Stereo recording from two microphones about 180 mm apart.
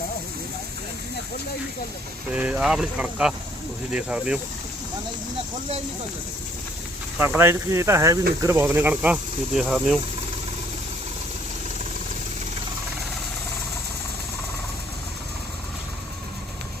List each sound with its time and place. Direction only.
2.3 s speech: 5° right (ahead or behind)
7.3 s speech: 15° right (ahead or behind)